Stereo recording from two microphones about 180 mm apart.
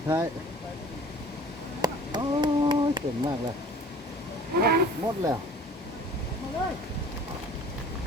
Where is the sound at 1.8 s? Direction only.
25° right (ahead or behind).